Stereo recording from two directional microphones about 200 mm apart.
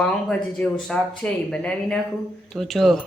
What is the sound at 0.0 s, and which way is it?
Speech, 5° left (ahead or behind).